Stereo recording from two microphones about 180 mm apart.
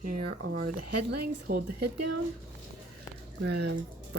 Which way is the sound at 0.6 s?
60° right (ahead or behind).